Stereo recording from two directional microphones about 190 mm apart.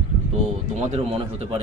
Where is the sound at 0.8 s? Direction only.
35° right (ahead or behind).